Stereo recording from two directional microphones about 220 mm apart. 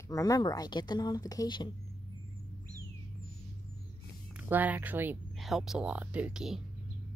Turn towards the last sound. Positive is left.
turn(degrees=0)  # may be behind; listen again after turning